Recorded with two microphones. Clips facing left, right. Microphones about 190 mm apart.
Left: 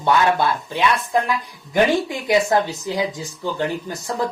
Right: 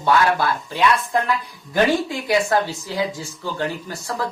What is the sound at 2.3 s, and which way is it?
Speech, 20° left (ahead or behind).